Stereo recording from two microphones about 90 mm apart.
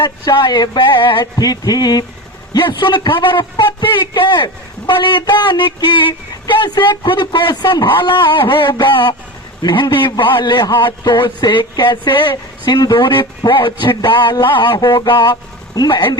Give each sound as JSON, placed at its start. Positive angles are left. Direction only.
{"t": 0.0, "sound": "speech", "side_deg": 55}
{"t": 2.5, "sound": "a man's voice", "side_deg": 60}
{"t": 12.7, "sound": "a man's voice", "side_deg": 50}